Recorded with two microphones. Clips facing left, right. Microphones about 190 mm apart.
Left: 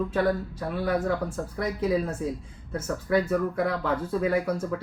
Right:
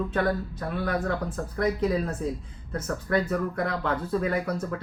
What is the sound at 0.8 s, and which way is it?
Speech, 10° left (ahead or behind).